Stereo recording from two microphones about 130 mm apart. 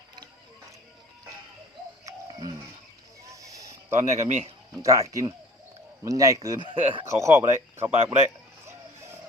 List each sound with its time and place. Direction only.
3.3 s a sound: 25° right (ahead or behind)
4.0 s speech: 65° right (ahead or behind)
4.8 s speech: 25° right (ahead or behind)
8.0 s speech: 55° right (ahead or behind)
8.6 s music: 20° right (ahead or behind)